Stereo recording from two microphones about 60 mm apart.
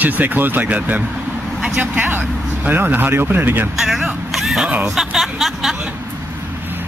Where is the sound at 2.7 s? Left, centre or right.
Right.